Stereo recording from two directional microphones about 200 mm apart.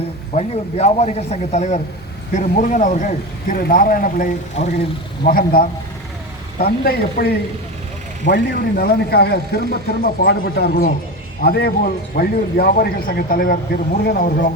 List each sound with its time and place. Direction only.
0.3 s speech: 30° left (ahead or behind)